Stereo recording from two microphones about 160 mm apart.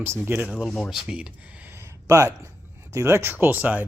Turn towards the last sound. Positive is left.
turn(degrees=-10)  # may be behind; listen again after turning